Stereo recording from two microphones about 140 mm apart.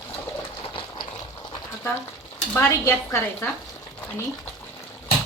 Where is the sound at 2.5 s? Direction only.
15° left (ahead or behind).